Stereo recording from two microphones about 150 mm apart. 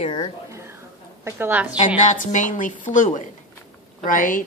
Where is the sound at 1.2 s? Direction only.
15° right (ahead or behind).